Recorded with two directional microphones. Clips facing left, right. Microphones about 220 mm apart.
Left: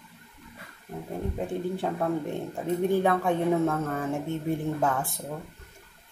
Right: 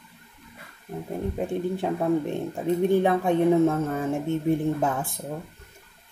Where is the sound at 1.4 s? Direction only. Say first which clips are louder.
Right 3 dB; 15° right (ahead or behind).